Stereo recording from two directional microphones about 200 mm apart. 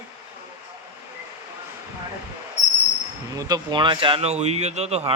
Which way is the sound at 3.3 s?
20° right (ahead or behind).